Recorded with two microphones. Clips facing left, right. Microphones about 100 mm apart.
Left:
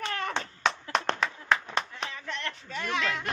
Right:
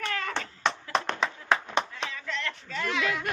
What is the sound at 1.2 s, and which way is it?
Clapping, 25° right (ahead or behind).